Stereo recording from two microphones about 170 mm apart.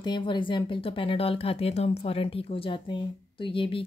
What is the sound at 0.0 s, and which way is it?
Speech, 25° left (ahead or behind).